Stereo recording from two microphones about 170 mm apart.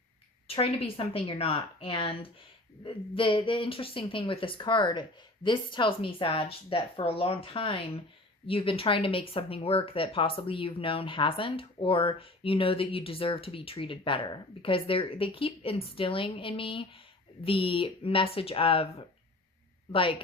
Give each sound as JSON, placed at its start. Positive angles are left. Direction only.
{"t": 0.4, "sound": "speech", "side_deg": 35}